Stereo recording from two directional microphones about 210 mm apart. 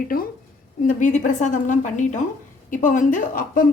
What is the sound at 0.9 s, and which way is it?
Speech, 35° left (ahead or behind).